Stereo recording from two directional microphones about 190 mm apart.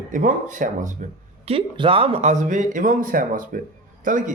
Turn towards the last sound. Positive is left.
turn(degrees=-45)  # may be behind; listen again after turning